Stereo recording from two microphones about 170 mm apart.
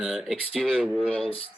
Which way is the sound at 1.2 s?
35° left (ahead or behind).